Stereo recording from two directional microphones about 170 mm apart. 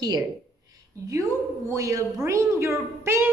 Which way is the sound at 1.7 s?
20° right (ahead or behind).